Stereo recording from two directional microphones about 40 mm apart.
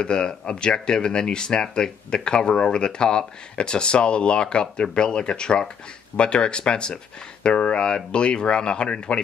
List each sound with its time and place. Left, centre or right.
0.0 s speech: left